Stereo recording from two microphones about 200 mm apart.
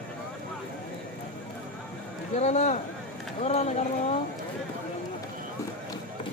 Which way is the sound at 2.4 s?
35° left (ahead or behind).